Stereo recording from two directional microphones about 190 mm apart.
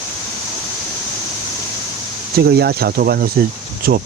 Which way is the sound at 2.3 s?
55° right (ahead or behind).